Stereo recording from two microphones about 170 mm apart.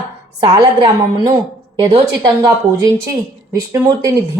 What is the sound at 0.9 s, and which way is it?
Speech, 20° right (ahead or behind).